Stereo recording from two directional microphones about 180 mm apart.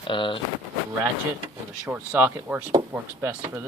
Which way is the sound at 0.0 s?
25° left (ahead or behind).